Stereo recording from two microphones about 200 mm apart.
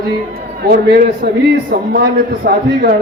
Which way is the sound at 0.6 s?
50° right (ahead or behind).